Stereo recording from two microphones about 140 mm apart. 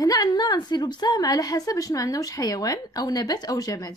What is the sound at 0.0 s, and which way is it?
A woman's voice, 25° left (ahead or behind).